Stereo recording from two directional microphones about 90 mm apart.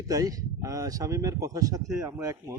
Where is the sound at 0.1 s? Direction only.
40° right (ahead or behind).